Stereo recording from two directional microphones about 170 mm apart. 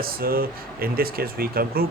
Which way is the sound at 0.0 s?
60° right (ahead or behind).